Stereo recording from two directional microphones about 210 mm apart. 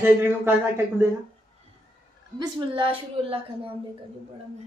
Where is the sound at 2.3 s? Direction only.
20° right (ahead or behind).